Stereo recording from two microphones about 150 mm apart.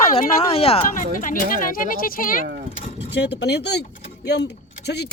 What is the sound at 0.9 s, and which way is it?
Speech, 65° left (ahead or behind).